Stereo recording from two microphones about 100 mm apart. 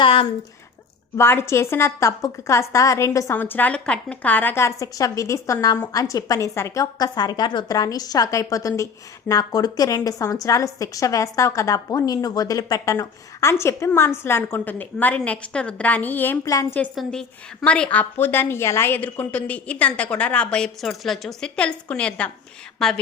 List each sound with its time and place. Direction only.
0.0 s a sound: 65° left (ahead or behind)
1.1 s a woman's voice: 25° left (ahead or behind)
3.3 s a woman's voice: 20° left (ahead or behind)
16.4 s a woman's voice: 35° left (ahead or behind)
16.9 s a woman's voice: centre (ahead or behind)
17.9 s a woman's voice: 20° left (ahead or behind); by 23.0 s 5° left (ahead or behind)